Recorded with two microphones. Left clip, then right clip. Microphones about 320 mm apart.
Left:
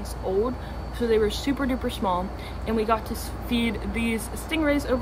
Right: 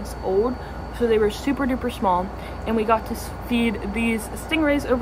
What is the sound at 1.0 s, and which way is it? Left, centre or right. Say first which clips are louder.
A woman's voice: right 3 dB; centre.